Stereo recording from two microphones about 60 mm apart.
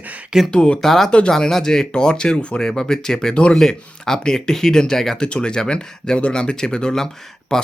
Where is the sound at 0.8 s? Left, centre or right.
Centre.